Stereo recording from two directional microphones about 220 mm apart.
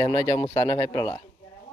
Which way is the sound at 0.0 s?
20° left (ahead or behind).